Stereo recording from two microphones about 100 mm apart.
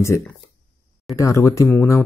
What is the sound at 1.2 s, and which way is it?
Speech, 30° left (ahead or behind).